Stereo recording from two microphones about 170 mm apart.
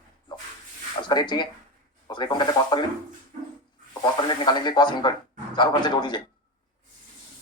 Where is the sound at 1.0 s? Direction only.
25° left (ahead or behind).